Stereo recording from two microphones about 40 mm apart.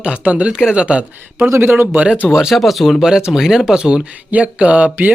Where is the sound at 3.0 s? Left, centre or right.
Centre.